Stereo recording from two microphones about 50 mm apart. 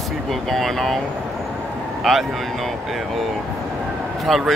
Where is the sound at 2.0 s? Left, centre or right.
Centre.